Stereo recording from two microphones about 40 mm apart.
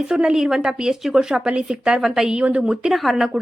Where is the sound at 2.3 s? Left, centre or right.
Right.